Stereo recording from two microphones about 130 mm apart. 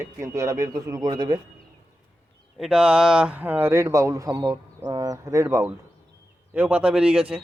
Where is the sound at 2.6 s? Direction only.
5° right (ahead or behind).